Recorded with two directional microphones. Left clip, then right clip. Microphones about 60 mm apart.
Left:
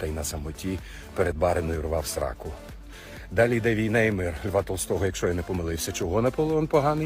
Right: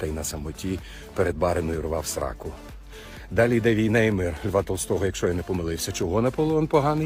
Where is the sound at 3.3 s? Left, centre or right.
Right.